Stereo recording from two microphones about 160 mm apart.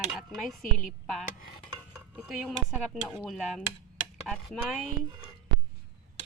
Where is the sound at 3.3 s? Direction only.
Centre (ahead or behind).